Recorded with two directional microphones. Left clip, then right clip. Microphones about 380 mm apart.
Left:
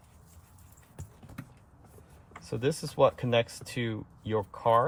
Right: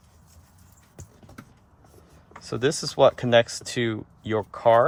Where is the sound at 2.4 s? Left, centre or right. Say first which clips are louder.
Right 6 dB; right.